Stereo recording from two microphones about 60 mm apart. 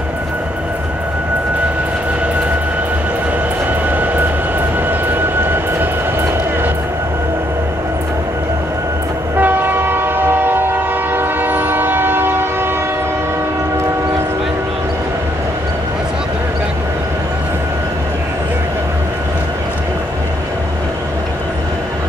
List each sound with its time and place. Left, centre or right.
3.9 s vehicle: right
9.4 s train: right